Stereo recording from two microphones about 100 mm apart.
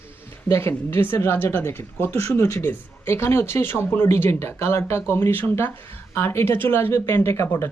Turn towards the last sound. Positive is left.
turn(degrees=25)  # may be behind; listen again after turning